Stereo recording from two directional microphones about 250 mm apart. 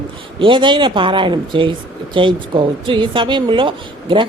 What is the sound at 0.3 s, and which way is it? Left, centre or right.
A woman's voice, centre.